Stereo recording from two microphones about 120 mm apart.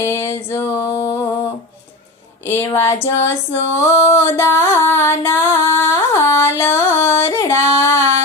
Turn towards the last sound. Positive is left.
turn(degrees=20)  # may be behind; listen again after turning